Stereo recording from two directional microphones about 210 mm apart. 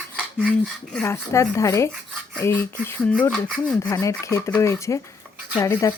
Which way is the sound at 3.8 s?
15° left (ahead or behind).